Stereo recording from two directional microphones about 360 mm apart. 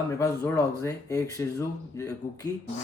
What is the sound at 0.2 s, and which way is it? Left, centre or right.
Speech, centre.